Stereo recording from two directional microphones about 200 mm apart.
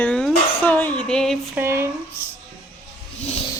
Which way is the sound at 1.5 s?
15° right (ahead or behind).